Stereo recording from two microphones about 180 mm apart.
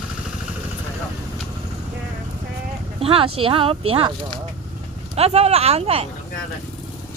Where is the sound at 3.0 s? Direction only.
30° right (ahead or behind).